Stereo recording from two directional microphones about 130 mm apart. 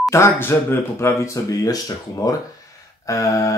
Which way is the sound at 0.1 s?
20° left (ahead or behind).